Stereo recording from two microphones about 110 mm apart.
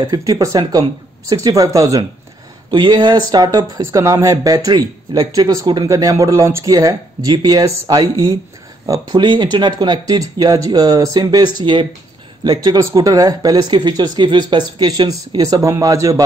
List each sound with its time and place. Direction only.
0.1 s speech: 30° right (ahead or behind)
2.7 s speech: 45° right (ahead or behind)
3.8 s speech: 25° right (ahead or behind)
9.2 s speech: 45° right (ahead or behind)
12.4 s speech: 35° right (ahead or behind)